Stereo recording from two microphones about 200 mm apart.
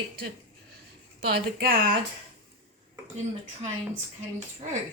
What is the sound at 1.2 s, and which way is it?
Speech, 50° right (ahead or behind).